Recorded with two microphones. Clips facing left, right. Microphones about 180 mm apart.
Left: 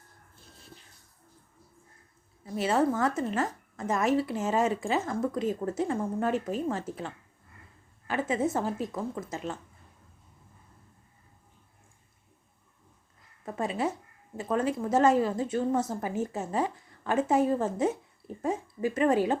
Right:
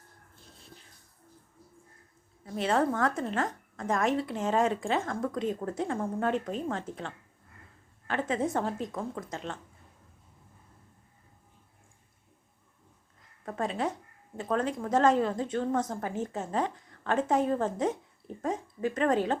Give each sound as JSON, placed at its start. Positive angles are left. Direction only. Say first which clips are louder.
{"t": 2.4, "sound": "a woman's voice", "louder": "left 1 dB", "side_deg": 5}
{"t": 13.4, "sound": "a woman's voice", "louder": "left 1 dB", "side_deg": 5}